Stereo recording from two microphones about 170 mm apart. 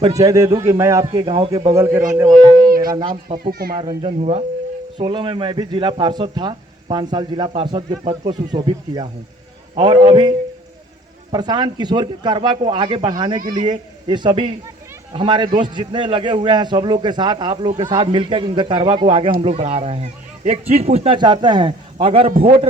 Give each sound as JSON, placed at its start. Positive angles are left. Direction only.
{"t": 0.0, "sound": "a man's voice", "side_deg": -20}
{"t": 1.7, "sound": "speech", "side_deg": -15}
{"t": 2.3, "sound": "a child's voice", "side_deg": -50}
{"t": 2.9, "sound": "a man's voice", "side_deg": -30}
{"t": 3.3, "sound": "speech", "side_deg": -60}
{"t": 3.8, "sound": "a man's voice", "side_deg": -35}